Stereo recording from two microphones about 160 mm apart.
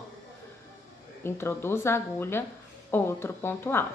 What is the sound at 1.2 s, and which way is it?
A woman's voice, 15° left (ahead or behind).